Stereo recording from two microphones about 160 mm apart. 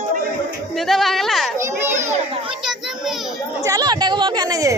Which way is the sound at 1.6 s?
15° right (ahead or behind).